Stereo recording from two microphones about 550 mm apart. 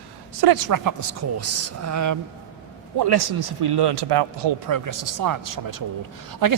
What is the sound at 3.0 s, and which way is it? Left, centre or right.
Speech, right.